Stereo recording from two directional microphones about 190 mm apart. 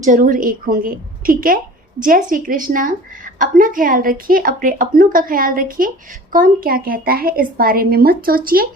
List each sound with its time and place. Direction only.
0.0 s a woman's voice: 45° right (ahead or behind)